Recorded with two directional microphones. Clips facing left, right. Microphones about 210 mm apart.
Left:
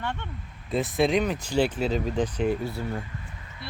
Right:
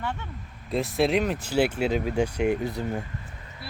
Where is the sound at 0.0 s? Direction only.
5° right (ahead or behind).